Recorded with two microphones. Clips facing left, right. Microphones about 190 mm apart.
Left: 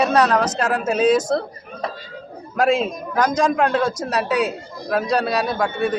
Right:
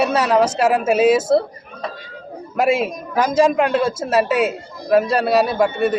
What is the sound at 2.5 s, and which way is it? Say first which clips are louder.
A man's voice: right 1 dB; 5° right (ahead or behind).